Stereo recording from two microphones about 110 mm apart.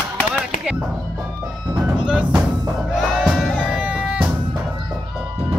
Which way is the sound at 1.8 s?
10° right (ahead or behind).